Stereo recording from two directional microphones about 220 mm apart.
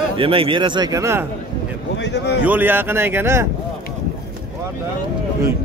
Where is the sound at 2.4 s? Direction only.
10° right (ahead or behind).